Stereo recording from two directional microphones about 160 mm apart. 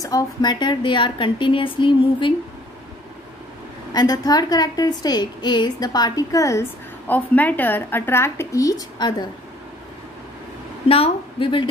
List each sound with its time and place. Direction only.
0.0 s speech: 25° left (ahead or behind)
3.9 s a woman's voice: 25° left (ahead or behind)
10.9 s speech: 35° left (ahead or behind)